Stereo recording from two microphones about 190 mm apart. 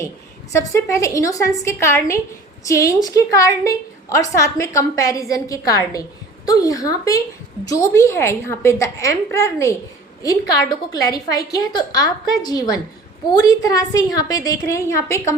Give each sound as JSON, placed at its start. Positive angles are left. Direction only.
{"t": 0.5, "sound": "a woman's voice", "side_deg": 15}